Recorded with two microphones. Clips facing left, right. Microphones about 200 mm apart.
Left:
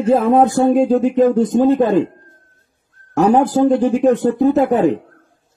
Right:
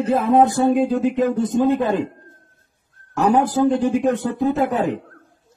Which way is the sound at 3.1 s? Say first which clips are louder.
Left 4 dB; 45° left (ahead or behind).